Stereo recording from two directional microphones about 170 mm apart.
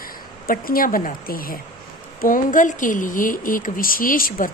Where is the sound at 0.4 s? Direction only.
60° left (ahead or behind).